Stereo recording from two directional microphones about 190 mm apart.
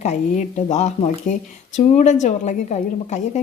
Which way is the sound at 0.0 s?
35° left (ahead or behind).